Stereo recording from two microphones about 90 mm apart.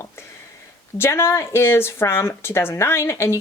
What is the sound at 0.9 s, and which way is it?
Speech, 30° left (ahead or behind).